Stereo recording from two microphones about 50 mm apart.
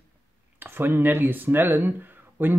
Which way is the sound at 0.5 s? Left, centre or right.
Right.